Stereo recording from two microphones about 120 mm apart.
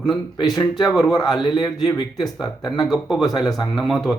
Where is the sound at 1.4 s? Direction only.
35° left (ahead or behind).